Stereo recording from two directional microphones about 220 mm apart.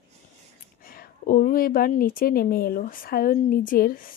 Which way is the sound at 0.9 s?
40° left (ahead or behind).